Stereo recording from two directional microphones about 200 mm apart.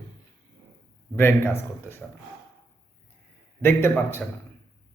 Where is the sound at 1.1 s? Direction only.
10° left (ahead or behind).